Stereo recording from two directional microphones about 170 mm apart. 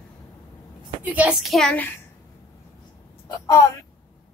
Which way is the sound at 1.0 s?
10° right (ahead or behind).